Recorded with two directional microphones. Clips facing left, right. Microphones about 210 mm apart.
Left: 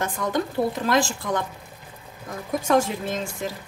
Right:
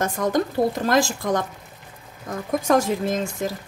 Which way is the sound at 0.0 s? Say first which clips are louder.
Right 4 dB; 40° right (ahead or behind).